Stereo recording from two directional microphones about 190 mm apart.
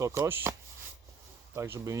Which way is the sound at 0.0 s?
10° right (ahead or behind).